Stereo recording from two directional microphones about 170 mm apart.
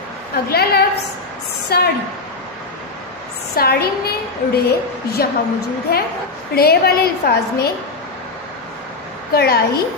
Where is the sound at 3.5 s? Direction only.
65° left (ahead or behind).